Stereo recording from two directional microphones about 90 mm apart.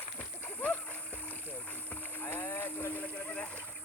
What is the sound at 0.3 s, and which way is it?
Boat, 20° left (ahead or behind).